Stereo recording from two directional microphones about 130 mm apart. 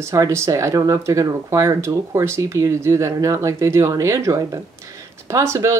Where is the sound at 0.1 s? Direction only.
25° right (ahead or behind).